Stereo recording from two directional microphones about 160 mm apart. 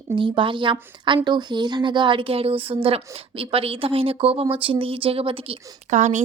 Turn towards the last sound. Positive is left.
turn(degrees=-50)  # may be behind; listen again after turning